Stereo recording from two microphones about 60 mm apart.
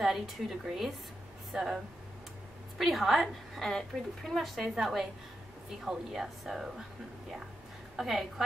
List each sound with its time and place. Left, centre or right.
0.0 s a woman's voice: centre
2.8 s a woman's voice: centre
7.9 s a woman's voice: centre